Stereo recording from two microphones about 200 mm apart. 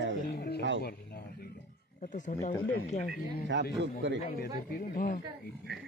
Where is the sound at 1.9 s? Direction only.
40° left (ahead or behind).